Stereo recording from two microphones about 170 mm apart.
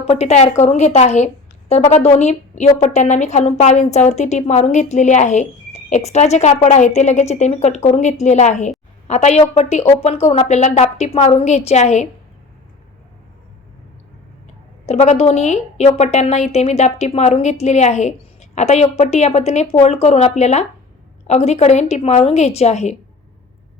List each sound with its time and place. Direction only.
0.1 s a woman's voice: 40° left (ahead or behind)
14.8 s a woman's voice: 40° left (ahead or behind)